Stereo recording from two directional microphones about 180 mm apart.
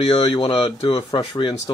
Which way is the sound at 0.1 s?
25° left (ahead or behind).